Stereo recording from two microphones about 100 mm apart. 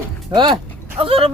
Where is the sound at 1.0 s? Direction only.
65° right (ahead or behind).